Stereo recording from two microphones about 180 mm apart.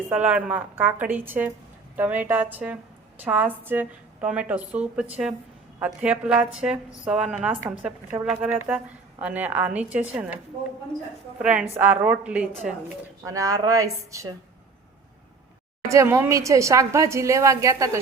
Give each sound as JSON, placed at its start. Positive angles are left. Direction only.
{"t": 0.3, "sound": "a woman's voice", "side_deg": -5}
{"t": 13.2, "sound": "a woman's voice", "side_deg": -20}
{"t": 15.9, "sound": "a woman's voice", "side_deg": -15}